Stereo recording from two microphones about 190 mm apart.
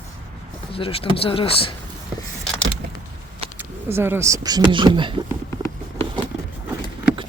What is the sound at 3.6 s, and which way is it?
Speech, 10° right (ahead or behind).